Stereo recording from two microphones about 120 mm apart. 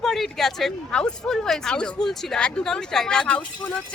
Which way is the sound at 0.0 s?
Centre (ahead or behind).